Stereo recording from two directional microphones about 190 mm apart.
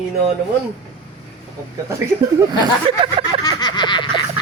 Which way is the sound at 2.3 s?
20° right (ahead or behind).